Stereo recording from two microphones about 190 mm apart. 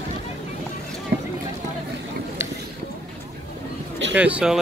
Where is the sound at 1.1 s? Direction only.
55° right (ahead or behind).